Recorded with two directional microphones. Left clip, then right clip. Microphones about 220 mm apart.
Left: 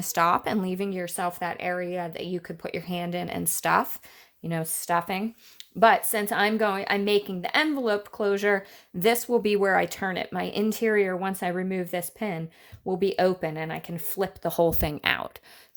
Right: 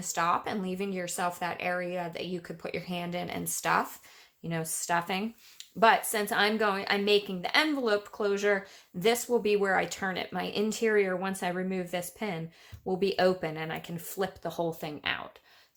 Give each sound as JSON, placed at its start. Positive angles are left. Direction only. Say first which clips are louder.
{"t": 0.0, "sound": "speech", "louder": "left 5 dB", "side_deg": 40}